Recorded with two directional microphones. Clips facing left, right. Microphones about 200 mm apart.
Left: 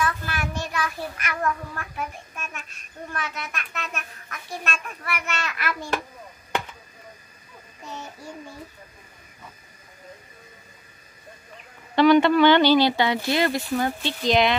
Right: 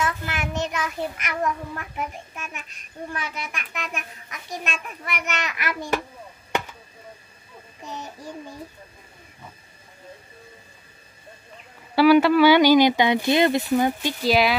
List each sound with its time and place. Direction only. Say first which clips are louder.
0.0 s a child's voice: even; 20° right (ahead or behind)
7.8 s child singing: right 2 dB; 15° right (ahead or behind)
11.9 s a child's voice: right 1 dB; 5° right (ahead or behind)